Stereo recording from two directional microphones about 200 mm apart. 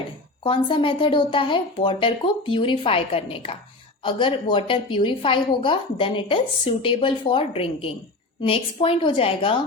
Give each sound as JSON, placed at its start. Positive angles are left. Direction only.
{"t": 0.4, "sound": "speech", "side_deg": 25}